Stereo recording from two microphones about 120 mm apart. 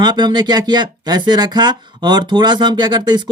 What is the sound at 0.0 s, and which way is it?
Speech, 35° right (ahead or behind).